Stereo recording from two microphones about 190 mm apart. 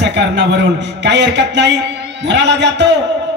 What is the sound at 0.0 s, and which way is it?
Speech, 65° right (ahead or behind).